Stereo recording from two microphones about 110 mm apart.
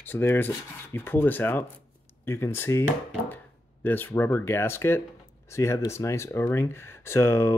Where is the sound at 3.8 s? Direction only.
20° left (ahead or behind).